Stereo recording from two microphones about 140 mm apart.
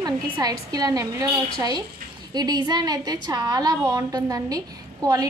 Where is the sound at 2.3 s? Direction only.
30° right (ahead or behind).